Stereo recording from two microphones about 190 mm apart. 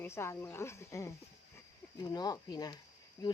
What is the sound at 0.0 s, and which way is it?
Speech, 15° left (ahead or behind).